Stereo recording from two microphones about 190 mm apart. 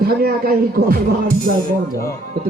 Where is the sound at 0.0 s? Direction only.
55° right (ahead or behind).